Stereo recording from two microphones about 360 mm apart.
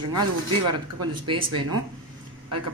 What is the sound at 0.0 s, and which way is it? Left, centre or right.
Speech, right.